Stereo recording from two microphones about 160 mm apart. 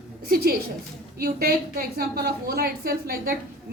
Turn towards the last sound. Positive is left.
turn(degrees=-70)  # may be behind; listen again after turning